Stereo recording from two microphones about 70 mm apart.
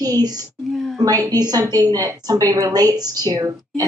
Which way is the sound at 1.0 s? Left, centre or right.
Right.